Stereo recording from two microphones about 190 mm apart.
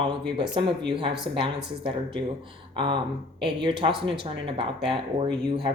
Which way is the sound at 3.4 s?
25° right (ahead or behind).